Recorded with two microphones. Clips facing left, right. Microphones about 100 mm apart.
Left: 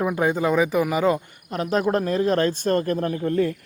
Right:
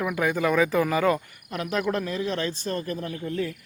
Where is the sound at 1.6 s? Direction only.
35° left (ahead or behind); by 3.5 s 55° left (ahead or behind).